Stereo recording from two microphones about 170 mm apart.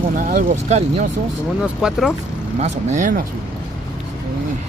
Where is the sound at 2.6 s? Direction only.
45° right (ahead or behind).